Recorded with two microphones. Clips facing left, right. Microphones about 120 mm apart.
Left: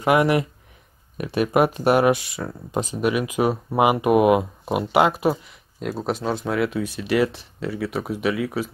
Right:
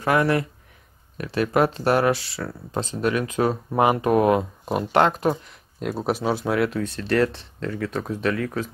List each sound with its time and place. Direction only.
0.0 s speech: 15° left (ahead or behind)